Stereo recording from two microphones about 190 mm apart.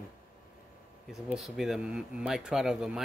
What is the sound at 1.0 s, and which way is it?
Speech, centre (ahead or behind).